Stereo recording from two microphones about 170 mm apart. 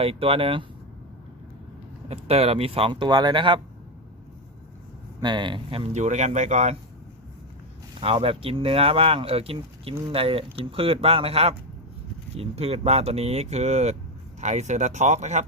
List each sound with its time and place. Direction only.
0.0 s speech: 35° right (ahead or behind)
2.0 s speech: 35° right (ahead or behind)
5.2 s speech: 25° right (ahead or behind); by 6.7 s 45° right (ahead or behind)
8.0 s speech: 35° right (ahead or behind)